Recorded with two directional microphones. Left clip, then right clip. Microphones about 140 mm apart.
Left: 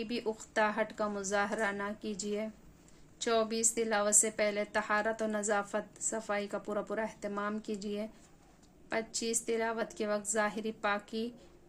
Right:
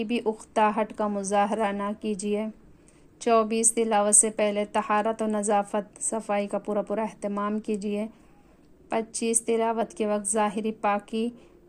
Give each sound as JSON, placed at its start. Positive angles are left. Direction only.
{"t": 0.0, "sound": "a woman's voice", "side_deg": -40}
{"t": 8.9, "sound": "a woman's voice", "side_deg": -40}